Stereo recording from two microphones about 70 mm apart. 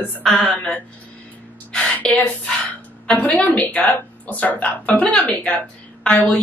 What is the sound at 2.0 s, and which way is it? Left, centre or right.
A woman's voice, centre.